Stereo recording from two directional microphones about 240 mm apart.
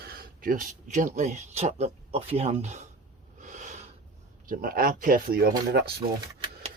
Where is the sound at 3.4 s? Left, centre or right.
Right.